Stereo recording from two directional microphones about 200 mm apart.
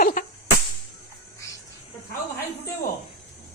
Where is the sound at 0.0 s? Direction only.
40° left (ahead or behind).